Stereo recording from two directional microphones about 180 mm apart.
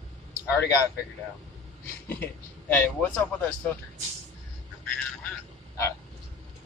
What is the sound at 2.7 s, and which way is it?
Speech, 10° left (ahead or behind).